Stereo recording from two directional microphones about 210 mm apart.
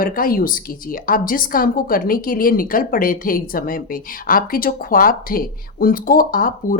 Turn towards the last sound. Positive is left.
turn(degrees=40)  # may be behind; listen again after turning